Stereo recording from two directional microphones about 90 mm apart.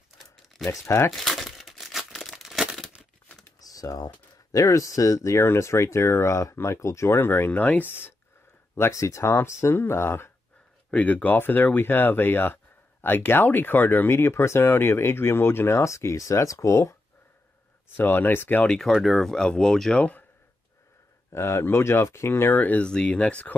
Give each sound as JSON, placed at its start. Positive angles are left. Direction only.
{"t": 0.7, "sound": "speech", "side_deg": 30}
{"t": 1.1, "sound": "crumpling", "side_deg": 5}
{"t": 3.6, "sound": "speech", "side_deg": 40}
{"t": 8.7, "sound": "speech", "side_deg": 30}
{"t": 10.9, "sound": "speech", "side_deg": 15}
{"t": 17.9, "sound": "speech", "side_deg": 20}
{"t": 18.8, "sound": "speech", "side_deg": 0}
{"t": 21.3, "sound": "speech", "side_deg": 30}